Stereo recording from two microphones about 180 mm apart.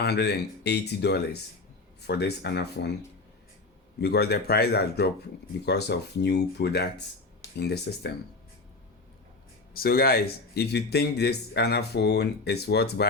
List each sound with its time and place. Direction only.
0.0 s speech: 65° left (ahead or behind)
4.0 s a man's voice: 65° left (ahead or behind)
9.7 s a man's voice: 55° left (ahead or behind)